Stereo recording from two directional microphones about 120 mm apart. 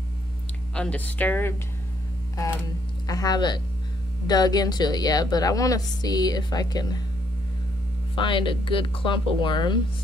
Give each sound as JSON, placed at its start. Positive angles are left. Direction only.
{"t": 0.7, "sound": "speech", "side_deg": 10}
{"t": 3.1, "sound": "a woman's voice", "side_deg": 30}
{"t": 8.2, "sound": "speech", "side_deg": 45}